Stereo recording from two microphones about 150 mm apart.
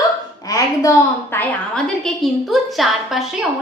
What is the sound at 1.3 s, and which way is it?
A woman's voice, 10° left (ahead or behind).